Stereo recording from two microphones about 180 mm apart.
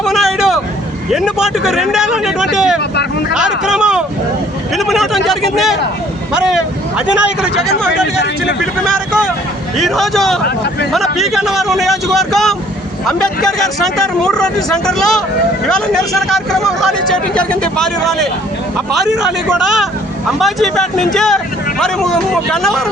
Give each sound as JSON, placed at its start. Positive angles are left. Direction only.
{"t": 0.0, "sound": "vehicle", "side_deg": 0}
{"t": 1.1, "sound": "speech", "side_deg": 0}
{"t": 2.9, "sound": "speech", "side_deg": 70}
{"t": 3.3, "sound": "speech", "side_deg": -5}
{"t": 7.9, "sound": "speech", "side_deg": 70}
{"t": 9.7, "sound": "speech", "side_deg": 0}